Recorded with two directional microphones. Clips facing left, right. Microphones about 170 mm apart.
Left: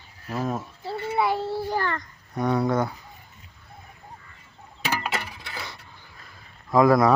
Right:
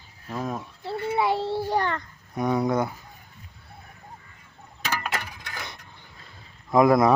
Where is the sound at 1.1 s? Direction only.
25° right (ahead or behind).